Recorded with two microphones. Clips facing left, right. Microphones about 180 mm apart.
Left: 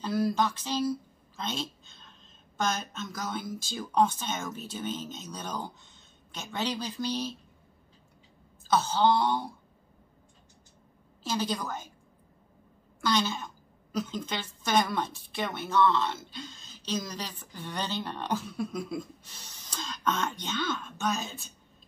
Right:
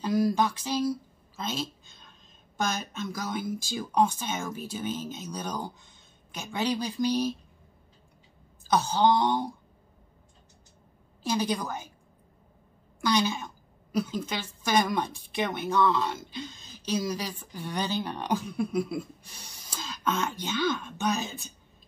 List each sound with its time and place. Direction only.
0.0 s a woman's voice: 15° right (ahead or behind)
8.6 s a woman's voice: 15° right (ahead or behind)
11.2 s a woman's voice: 15° right (ahead or behind)
13.0 s a woman's voice: 15° right (ahead or behind)